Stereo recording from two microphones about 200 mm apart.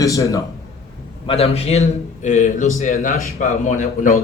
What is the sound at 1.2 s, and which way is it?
A man's voice, 30° left (ahead or behind).